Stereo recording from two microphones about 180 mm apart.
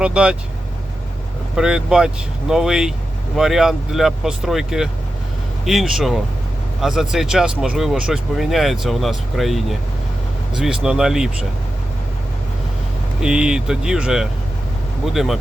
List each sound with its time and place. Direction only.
0.0 s speech: 5° right (ahead or behind)
1.5 s speech: 5° right (ahead or behind)
13.2 s speech: 5° right (ahead or behind)